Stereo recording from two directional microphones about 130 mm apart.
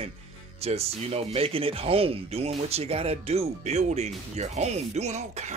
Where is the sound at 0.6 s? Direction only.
50° right (ahead or behind).